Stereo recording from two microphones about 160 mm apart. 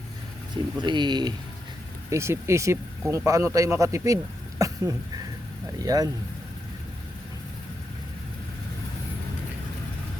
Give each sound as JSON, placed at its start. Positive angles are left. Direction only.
{"t": 0.5, "sound": "speech", "side_deg": -30}
{"t": 2.0, "sound": "speech", "side_deg": -15}